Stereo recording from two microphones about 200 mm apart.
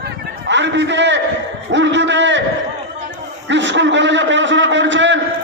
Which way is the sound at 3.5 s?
65° right (ahead or behind).